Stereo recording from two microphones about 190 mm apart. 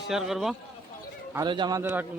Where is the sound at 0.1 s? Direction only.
Centre (ahead or behind).